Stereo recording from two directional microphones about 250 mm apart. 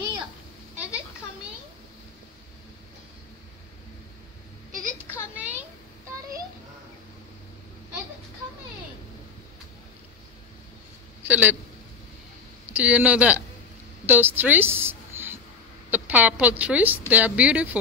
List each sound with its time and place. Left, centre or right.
5.3 s a sound: centre
11.2 s a man's voice: centre
12.7 s a woman's voice: centre